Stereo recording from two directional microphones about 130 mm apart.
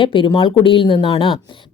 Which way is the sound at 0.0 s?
40° left (ahead or behind).